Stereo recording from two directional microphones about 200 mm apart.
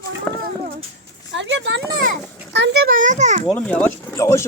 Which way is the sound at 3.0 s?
35° right (ahead or behind).